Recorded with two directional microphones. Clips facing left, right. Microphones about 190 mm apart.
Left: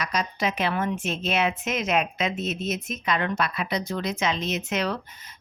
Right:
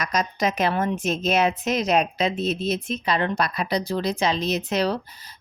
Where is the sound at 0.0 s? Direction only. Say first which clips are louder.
Right 3 dB; 45° right (ahead or behind).